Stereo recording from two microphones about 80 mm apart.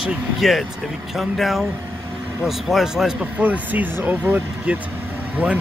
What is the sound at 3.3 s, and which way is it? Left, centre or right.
Speech, centre.